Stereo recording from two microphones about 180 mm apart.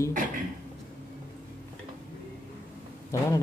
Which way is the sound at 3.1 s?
20° left (ahead or behind).